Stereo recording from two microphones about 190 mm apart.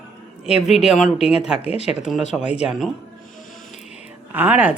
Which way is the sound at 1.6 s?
35° left (ahead or behind).